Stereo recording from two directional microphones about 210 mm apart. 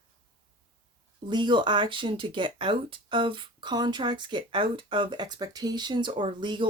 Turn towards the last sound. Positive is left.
turn(degrees=-20)  # may be behind; listen again after turning